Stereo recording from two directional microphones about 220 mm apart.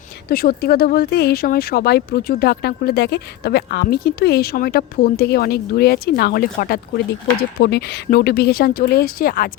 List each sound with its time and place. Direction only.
0.3 s speech: 45° left (ahead or behind)